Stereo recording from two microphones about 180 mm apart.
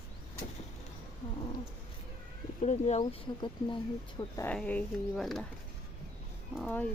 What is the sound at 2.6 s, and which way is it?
Speech, 40° left (ahead or behind).